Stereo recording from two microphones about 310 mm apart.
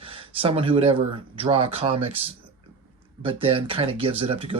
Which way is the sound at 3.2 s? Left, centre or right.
Centre.